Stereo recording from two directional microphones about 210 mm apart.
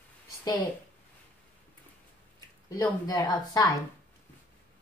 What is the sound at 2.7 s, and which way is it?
Speech, 15° left (ahead or behind).